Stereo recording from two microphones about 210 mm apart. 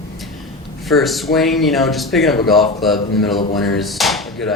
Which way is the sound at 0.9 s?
Centre (ahead or behind).